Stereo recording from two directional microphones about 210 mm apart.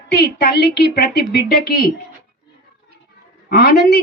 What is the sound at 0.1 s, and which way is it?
A woman's voice, 50° left (ahead or behind).